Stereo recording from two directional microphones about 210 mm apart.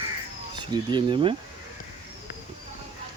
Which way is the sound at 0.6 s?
20° right (ahead or behind).